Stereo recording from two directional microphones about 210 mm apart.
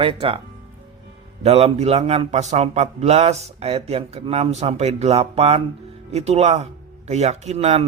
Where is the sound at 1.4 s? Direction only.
30° right (ahead or behind).